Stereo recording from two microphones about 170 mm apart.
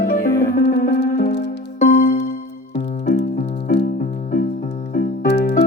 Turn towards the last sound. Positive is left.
turn(degrees=75)  # may be behind; listen again after turning